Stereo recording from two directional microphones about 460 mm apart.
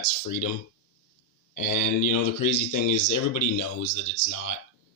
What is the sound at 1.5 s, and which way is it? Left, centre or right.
Speech, left.